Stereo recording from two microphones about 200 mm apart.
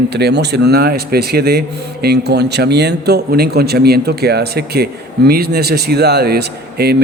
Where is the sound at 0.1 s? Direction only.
55° right (ahead or behind).